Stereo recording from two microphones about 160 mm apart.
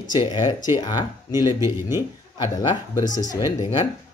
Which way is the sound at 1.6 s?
15° right (ahead or behind).